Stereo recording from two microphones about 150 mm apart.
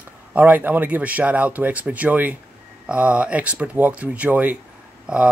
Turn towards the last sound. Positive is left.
turn(degrees=-5)  # may be behind; listen again after turning